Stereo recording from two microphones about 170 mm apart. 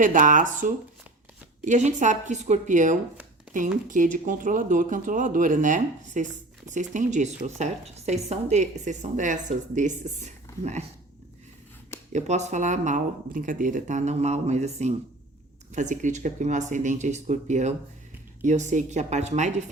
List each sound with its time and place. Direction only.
0.0 s a woman's voice: 50° right (ahead or behind)
12.1 s a woman's voice: 40° right (ahead or behind)